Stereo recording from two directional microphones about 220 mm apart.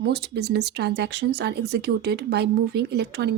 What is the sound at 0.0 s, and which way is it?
A woman's voice, 45° right (ahead or behind).